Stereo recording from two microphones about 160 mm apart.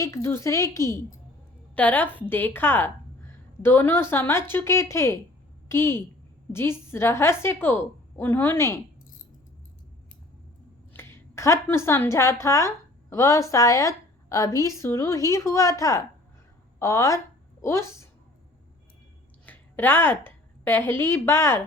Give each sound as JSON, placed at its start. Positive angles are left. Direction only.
{"t": 0.0, "sound": "a woman's voice", "side_deg": 15}
{"t": 10.9, "sound": "a woman's voice", "side_deg": 15}
{"t": 19.5, "sound": "a woman's voice", "side_deg": 10}